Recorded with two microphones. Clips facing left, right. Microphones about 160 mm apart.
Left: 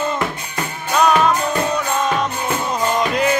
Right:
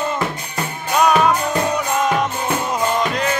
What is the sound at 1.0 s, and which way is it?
Music, 10° right (ahead or behind).